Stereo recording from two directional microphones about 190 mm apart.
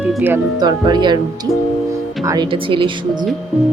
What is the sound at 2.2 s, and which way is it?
Speech, 25° right (ahead or behind).